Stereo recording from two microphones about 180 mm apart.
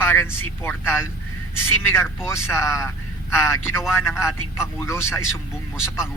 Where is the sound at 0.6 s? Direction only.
15° left (ahead or behind).